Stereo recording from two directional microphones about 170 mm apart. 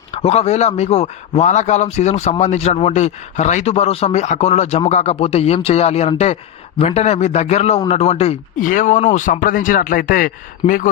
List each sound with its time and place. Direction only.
0.1 s speech: 35° left (ahead or behind); by 10.8 s 55° left (ahead or behind)